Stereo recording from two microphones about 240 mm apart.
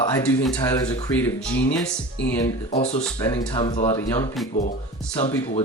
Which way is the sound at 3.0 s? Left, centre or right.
Centre.